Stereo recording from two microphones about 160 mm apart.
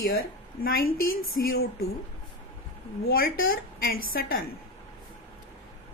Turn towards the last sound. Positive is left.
turn(degrees=70)  # may be behind; listen again after turning